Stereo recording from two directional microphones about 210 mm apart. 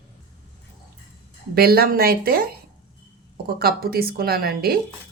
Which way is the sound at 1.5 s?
45° right (ahead or behind).